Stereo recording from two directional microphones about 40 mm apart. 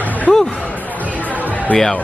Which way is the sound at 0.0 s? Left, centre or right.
Left.